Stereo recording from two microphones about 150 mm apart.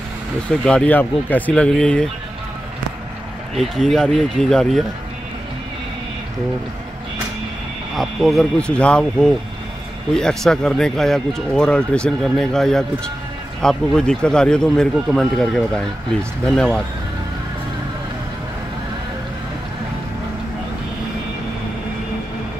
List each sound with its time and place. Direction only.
0.5 s speech: 5° left (ahead or behind)
3.5 s speech: centre (ahead or behind)
7.9 s speech: centre (ahead or behind)